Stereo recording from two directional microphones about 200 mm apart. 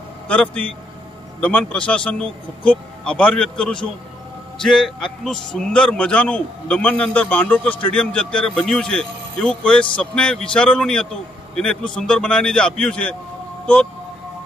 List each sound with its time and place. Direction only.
0.3 s a man's voice: 5° left (ahead or behind)